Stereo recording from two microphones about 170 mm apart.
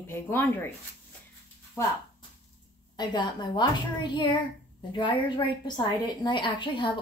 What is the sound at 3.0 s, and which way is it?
A woman's voice, 25° left (ahead or behind).